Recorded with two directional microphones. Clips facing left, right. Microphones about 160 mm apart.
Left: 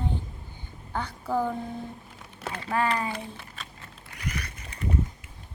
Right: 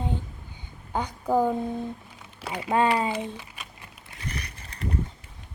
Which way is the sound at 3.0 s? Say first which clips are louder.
Right 5 dB; 20° right (ahead or behind).